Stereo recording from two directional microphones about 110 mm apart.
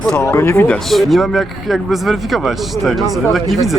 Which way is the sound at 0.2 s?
25° left (ahead or behind).